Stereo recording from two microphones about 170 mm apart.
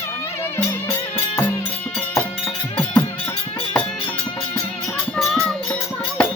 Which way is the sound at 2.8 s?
10° left (ahead or behind).